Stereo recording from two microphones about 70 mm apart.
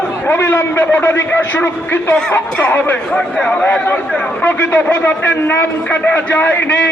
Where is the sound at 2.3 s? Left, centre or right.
Left.